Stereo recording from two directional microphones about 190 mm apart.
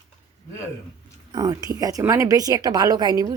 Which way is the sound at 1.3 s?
20° right (ahead or behind).